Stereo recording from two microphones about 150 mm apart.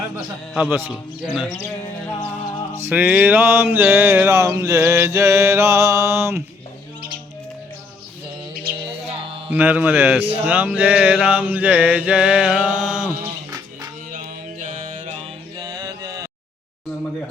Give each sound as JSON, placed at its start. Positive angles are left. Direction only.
{"t": 0.5, "sound": "mantra", "side_deg": -10}
{"t": 0.9, "sound": "speech", "side_deg": -5}
{"t": 2.9, "sound": "mantra", "side_deg": -10}
{"t": 9.5, "sound": "mantra", "side_deg": -10}
{"t": 14.1, "sound": "mantra", "side_deg": -55}
{"t": 15.5, "sound": "music", "side_deg": -30}